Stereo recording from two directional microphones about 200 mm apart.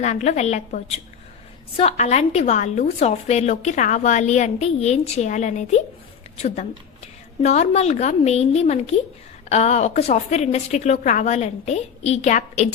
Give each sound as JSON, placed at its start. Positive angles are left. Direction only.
{"t": 0.0, "sound": "a woman's voice", "side_deg": 35}